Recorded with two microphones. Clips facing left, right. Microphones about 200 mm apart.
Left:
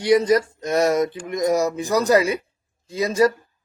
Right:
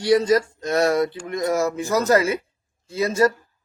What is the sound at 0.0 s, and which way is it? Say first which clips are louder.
A man's voice: left 1 dB; 20° left (ahead or behind).